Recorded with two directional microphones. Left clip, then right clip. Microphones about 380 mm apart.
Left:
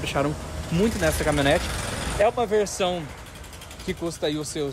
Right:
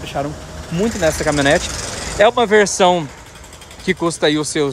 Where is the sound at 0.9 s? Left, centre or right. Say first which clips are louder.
Right 10 dB; right.